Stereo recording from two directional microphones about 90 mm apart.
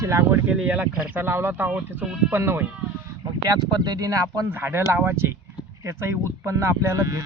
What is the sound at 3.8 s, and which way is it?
Speech, 45° right (ahead or behind).